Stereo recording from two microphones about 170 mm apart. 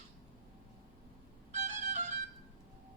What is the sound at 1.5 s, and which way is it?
Violin, 45° right (ahead or behind).